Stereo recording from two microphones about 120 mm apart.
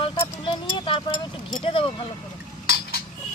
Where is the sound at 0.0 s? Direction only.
45° left (ahead or behind).